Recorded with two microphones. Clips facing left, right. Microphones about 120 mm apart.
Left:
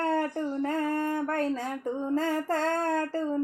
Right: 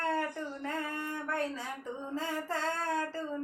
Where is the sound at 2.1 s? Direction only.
50° left (ahead or behind).